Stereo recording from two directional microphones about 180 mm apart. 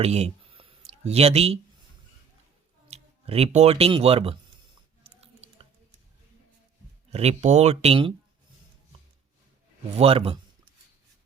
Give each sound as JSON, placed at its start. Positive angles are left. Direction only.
{"t": 0.0, "sound": "a sound", "side_deg": -35}
{"t": 2.9, "sound": "speech", "side_deg": -35}
{"t": 5.0, "sound": "chewing", "side_deg": -35}
{"t": 7.1, "sound": "speech", "side_deg": -35}
{"t": 10.0, "sound": "speech", "side_deg": -30}